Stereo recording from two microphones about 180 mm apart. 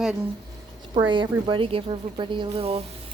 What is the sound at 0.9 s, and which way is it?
Speech, 25° right (ahead or behind).